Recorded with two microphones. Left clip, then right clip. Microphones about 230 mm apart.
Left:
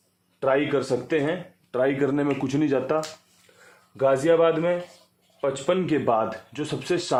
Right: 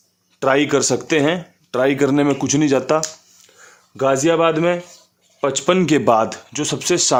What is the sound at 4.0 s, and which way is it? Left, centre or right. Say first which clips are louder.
Speech: right 4 dB; right.